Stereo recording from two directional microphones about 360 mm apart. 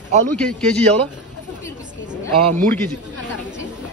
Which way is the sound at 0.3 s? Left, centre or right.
Centre.